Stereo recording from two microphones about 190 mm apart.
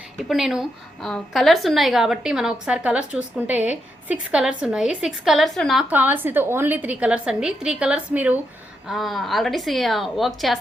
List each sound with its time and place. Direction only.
0.2 s a woman's voice: centre (ahead or behind)